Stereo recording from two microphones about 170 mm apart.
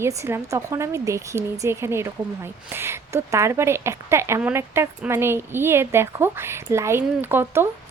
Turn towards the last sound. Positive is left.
turn(degrees=-15)  # may be behind; listen again after turning